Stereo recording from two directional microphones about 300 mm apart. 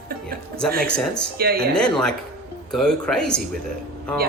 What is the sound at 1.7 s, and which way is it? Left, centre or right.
Speech, centre.